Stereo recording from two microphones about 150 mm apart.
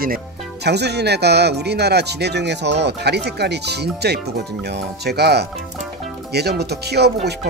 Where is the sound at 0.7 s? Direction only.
90° right.